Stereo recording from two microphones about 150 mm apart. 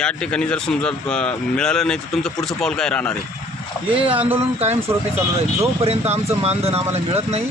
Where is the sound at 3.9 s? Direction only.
10° right (ahead or behind).